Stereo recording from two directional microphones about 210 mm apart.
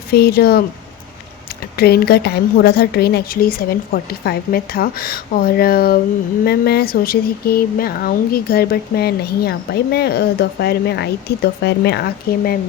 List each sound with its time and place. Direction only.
0.1 s speech: 50° left (ahead or behind)
1.7 s speech: 50° left (ahead or behind)